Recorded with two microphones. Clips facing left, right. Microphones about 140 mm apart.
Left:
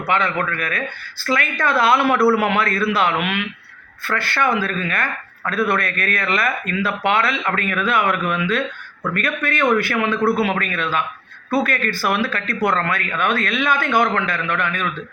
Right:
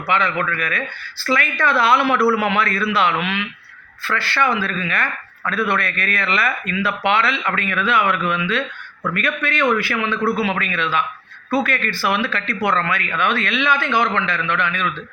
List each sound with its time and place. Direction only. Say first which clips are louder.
0.1 s speech: even; 40° left (ahead or behind)